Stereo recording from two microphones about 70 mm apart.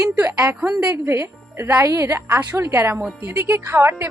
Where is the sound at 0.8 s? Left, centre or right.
Right.